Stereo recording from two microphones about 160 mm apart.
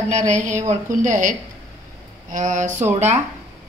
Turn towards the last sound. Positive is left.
turn(degrees=-45)  # may be behind; listen again after turning